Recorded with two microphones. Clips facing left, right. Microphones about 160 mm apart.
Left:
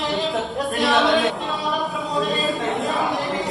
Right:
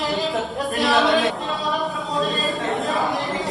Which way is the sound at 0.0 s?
Centre (ahead or behind).